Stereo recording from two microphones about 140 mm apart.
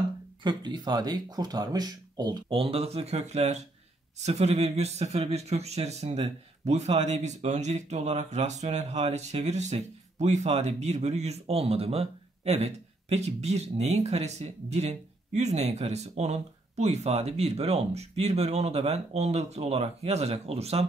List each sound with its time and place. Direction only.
0.4 s a man's voice: 35° right (ahead or behind)